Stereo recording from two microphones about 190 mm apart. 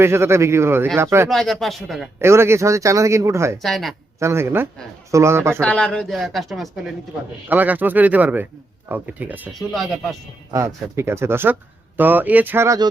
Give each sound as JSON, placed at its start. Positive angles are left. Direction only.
{"t": 0.0, "sound": "speech", "side_deg": -15}
{"t": 1.3, "sound": "speech", "side_deg": 0}
{"t": 2.2, "sound": "speech", "side_deg": -15}
{"t": 3.6, "sound": "speech", "side_deg": 0}
{"t": 4.2, "sound": "speech", "side_deg": -15}
{"t": 5.5, "sound": "speech", "side_deg": 5}
{"t": 10.5, "sound": "speech", "side_deg": -15}